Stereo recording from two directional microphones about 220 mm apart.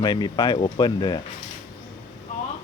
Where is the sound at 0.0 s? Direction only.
20° left (ahead or behind).